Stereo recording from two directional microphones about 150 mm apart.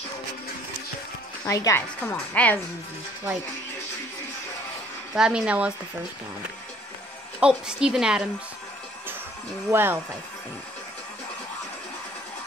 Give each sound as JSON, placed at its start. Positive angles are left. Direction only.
{"t": 1.4, "sound": "speech", "side_deg": 20}
{"t": 2.0, "sound": "a woman's voice", "side_deg": 5}
{"t": 5.1, "sound": "a woman's voice", "side_deg": -5}
{"t": 7.3, "sound": "a woman's voice", "side_deg": -5}
{"t": 9.7, "sound": "speech", "side_deg": -15}